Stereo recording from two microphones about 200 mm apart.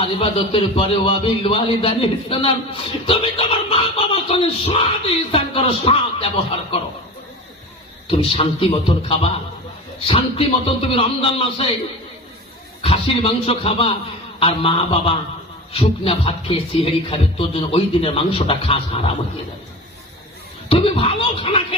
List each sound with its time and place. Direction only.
0.0 s speech: 25° left (ahead or behind)
8.0 s speech: 25° left (ahead or behind)
12.8 s speech: 30° left (ahead or behind)
20.7 s speech: 30° left (ahead or behind)